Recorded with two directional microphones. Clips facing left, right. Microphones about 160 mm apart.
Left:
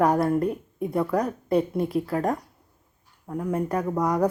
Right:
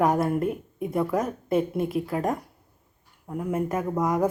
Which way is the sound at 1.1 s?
20° right (ahead or behind).